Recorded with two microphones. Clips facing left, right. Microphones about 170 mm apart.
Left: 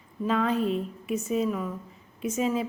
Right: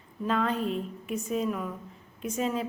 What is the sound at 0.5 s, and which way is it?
Speech, 40° left (ahead or behind).